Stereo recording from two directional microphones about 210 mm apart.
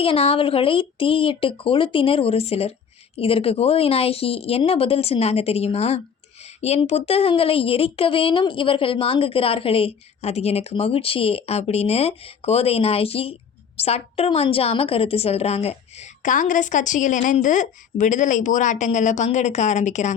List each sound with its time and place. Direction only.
0.0 s a woman's voice: 25° left (ahead or behind)